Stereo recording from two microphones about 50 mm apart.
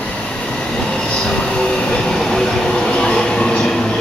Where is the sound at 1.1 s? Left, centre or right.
Centre.